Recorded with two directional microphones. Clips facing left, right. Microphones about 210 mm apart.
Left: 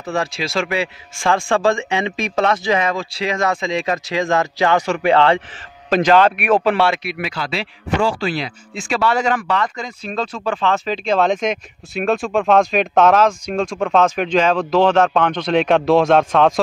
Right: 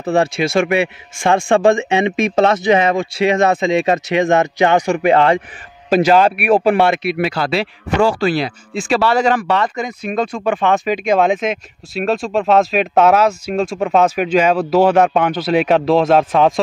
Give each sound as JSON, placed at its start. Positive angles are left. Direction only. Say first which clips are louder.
{"t": 0.1, "sound": "a man's voice", "louder": "right 7 dB", "side_deg": -25}
{"t": 7.0, "sound": "a man's voice", "louder": "right 8 dB", "side_deg": -30}
{"t": 7.3, "sound": "speech", "louder": "right 6 dB", "side_deg": -60}
{"t": 8.7, "sound": "speech", "louder": "right 4 dB", "side_deg": -30}